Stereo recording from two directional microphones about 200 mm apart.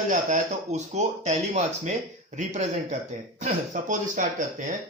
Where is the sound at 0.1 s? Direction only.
35° right (ahead or behind).